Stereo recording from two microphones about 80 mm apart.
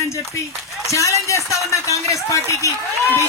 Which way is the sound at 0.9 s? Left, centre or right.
Left.